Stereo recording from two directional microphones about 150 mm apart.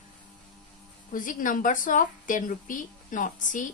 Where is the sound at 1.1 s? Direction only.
60° left (ahead or behind).